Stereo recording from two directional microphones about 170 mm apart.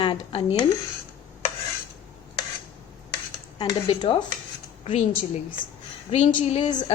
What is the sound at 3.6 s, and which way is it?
A woman's voice, 25° left (ahead or behind).